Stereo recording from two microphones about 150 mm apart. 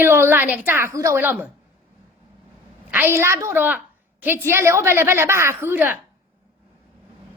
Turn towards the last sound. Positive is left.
turn(degrees=-15)  # may be behind; listen again after turning